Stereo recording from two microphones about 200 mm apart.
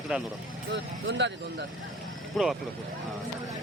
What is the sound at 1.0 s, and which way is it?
Speech, 65° right (ahead or behind).